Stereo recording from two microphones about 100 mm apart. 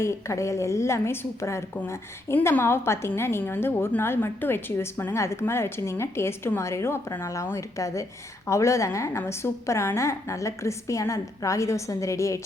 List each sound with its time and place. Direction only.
0.0 s a woman's voice: 30° left (ahead or behind)